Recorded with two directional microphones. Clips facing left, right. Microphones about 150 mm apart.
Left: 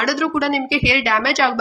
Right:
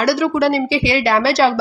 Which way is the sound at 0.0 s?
30° right (ahead or behind).